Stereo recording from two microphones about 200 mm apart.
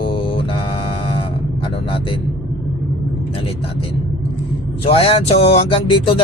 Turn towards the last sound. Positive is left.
turn(degrees=30)  # may be behind; listen again after turning